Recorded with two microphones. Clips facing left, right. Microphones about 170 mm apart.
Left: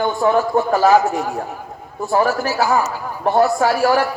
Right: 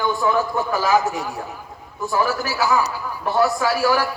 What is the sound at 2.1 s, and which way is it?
A man's voice, 45° left (ahead or behind).